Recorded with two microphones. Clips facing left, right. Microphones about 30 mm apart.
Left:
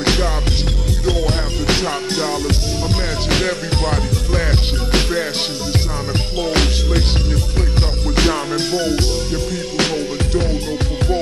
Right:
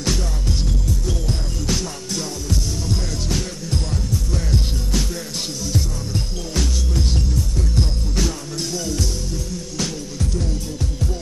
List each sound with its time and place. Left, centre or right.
0.0 s music: left
6.5 s music: left